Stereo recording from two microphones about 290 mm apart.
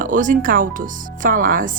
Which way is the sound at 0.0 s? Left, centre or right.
Right.